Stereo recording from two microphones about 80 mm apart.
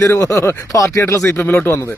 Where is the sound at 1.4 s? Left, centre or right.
Left.